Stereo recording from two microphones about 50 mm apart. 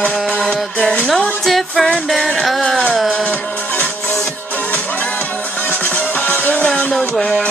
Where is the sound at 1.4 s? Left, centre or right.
Centre.